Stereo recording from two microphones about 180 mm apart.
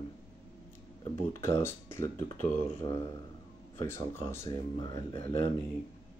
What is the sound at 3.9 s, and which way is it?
Speech, 15° left (ahead or behind).